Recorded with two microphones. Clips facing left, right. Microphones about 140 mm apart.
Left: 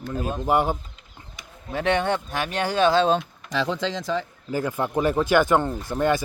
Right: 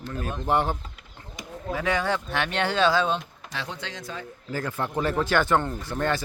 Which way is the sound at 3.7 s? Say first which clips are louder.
Left 10 dB; 90° left.